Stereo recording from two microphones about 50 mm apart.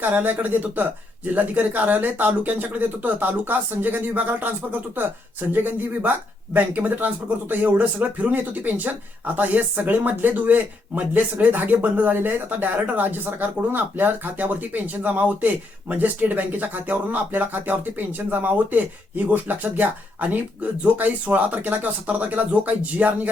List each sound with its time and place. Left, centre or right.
0.0 s speech: right